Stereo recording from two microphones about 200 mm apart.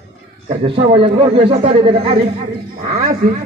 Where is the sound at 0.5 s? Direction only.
25° right (ahead or behind).